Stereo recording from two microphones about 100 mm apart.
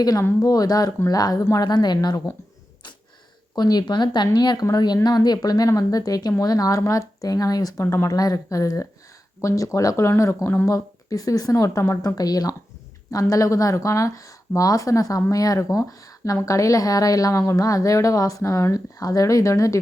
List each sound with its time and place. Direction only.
0.0 s speech: 40° left (ahead or behind)
3.5 s speech: 45° left (ahead or behind); by 10.7 s 25° left (ahead or behind)
10.7 s speech: 35° left (ahead or behind)